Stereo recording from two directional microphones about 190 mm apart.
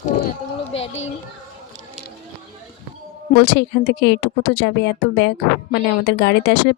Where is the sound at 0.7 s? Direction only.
30° left (ahead or behind).